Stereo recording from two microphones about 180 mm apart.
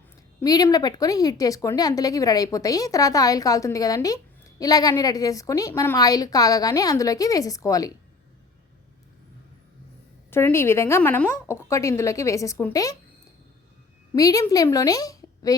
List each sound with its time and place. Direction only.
0.4 s speech: 20° left (ahead or behind)
10.3 s a woman's voice: 15° left (ahead or behind)
14.2 s a woman's voice: 20° left (ahead or behind)